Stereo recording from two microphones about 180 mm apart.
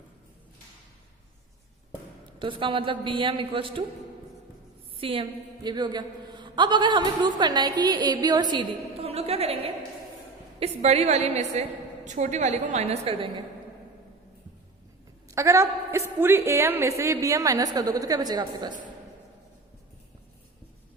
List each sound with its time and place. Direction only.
2.4 s a woman's voice: 30° right (ahead or behind)
4.9 s a woman's voice: 30° right (ahead or behind)
15.3 s a woman's voice: 15° right (ahead or behind)